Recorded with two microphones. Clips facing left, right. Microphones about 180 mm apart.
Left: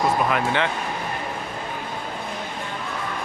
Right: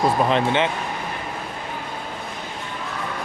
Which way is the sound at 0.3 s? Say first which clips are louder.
Right 3 dB; 25° right (ahead or behind).